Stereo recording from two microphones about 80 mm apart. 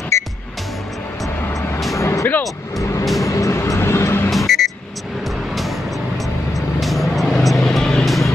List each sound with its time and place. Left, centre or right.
0.1 s music: left
2.0 s vehicle: left
3.2 s music: left
4.3 s a sound: centre
5.5 s vehicle: centre